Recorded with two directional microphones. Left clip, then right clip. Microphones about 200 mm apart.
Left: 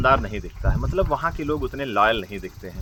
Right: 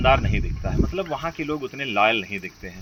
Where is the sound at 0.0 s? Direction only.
15° left (ahead or behind).